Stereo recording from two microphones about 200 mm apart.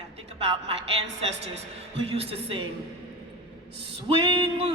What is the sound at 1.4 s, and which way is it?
A woman's voice, 30° right (ahead or behind).